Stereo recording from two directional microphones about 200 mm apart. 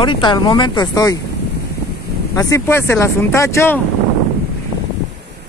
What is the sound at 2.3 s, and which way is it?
Speech, 15° left (ahead or behind).